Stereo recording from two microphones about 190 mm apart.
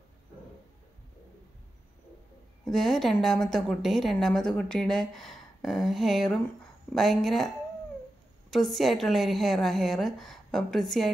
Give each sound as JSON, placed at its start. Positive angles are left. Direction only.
{"t": 2.6, "sound": "a woman's voice", "side_deg": 0}